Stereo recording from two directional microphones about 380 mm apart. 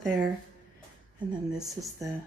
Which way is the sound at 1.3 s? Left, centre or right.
Centre.